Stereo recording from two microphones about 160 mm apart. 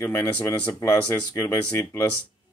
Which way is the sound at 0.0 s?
15° left (ahead or behind).